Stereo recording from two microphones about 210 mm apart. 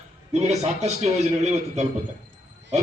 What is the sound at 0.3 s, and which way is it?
A man's voice, 30° right (ahead or behind).